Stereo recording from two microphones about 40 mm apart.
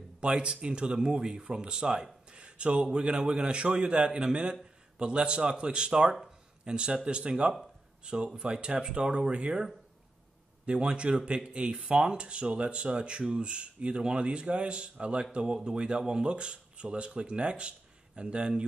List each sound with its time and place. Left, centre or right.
0.2 s speech: right
6.2 s a sound: right
7.1 s speech: right